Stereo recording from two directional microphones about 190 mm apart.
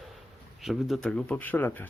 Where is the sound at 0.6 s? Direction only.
Centre (ahead or behind).